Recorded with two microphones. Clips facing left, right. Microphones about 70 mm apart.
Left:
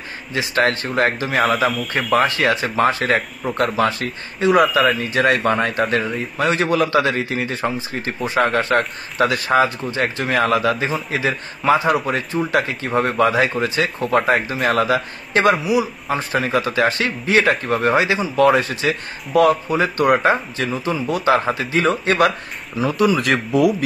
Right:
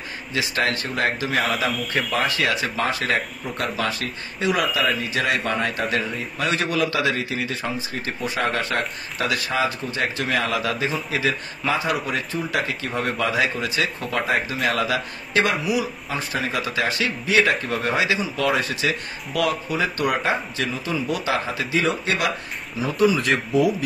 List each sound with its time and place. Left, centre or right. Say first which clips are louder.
0.6 s a man's voice: left 7 dB; left
1.7 s speech: left 4 dB; centre
2.2 s a man's voice: left 4 dB; left
4.7 s speech: left 6 dB; left
6.3 s a man's voice: left 6 dB; left
21.7 s speech: left 5 dB; left
22.8 s speech: left 3 dB; left